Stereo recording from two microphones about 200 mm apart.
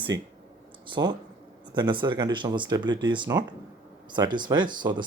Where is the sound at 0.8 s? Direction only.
25° right (ahead or behind).